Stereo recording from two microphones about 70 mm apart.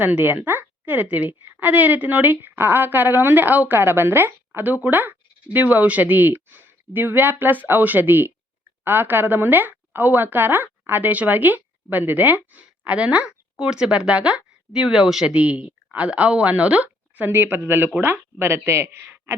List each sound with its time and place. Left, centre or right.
0.0 s a woman's voice: right; by 15.4 s centre
15.4 s a woman's voice: centre; by 19.4 s right